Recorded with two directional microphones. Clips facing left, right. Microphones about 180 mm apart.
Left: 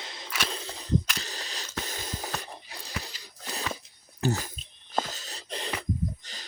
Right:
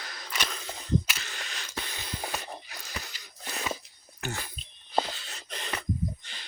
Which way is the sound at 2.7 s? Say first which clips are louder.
Left 2 dB; 30° left (ahead or behind).